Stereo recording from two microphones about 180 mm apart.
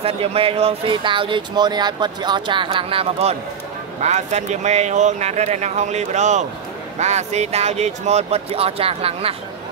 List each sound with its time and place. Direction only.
0.0 s speech: 30° right (ahead or behind)